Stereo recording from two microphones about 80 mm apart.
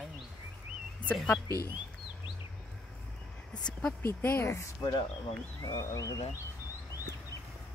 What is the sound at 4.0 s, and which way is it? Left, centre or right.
Speech, left.